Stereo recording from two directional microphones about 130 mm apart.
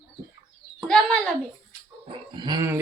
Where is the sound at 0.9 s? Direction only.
5° left (ahead or behind).